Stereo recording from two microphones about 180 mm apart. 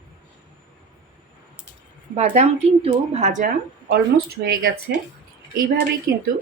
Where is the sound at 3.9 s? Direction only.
65° right (ahead or behind).